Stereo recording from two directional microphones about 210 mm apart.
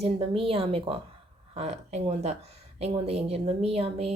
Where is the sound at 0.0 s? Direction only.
25° right (ahead or behind).